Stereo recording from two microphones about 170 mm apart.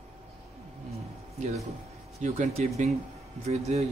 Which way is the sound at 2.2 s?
45° right (ahead or behind).